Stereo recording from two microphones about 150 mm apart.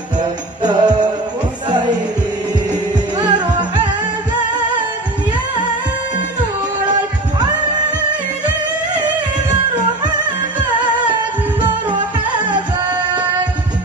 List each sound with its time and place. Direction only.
0.7 s music: 30° right (ahead or behind)
3.2 s music: 30° right (ahead or behind)
11.9 s music: 30° right (ahead or behind)